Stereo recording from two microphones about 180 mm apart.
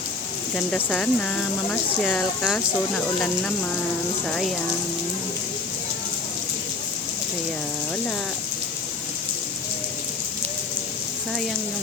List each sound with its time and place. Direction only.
0.5 s speech: 5° left (ahead or behind)